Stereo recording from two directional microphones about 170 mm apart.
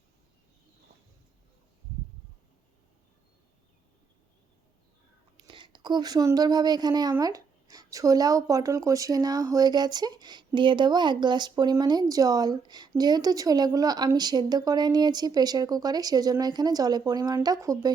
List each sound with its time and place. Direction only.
5.4 s whispering: 30° right (ahead or behind)
5.7 s speech: 25° right (ahead or behind)